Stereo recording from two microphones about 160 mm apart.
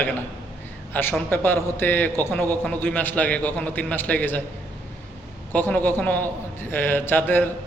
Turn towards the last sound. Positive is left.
turn(degrees=10)  # may be behind; listen again after turning